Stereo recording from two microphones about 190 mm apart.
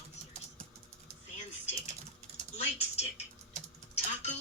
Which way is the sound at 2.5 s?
35° left (ahead or behind).